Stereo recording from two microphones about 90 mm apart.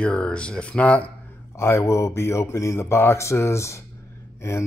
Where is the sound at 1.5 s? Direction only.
30° left (ahead or behind).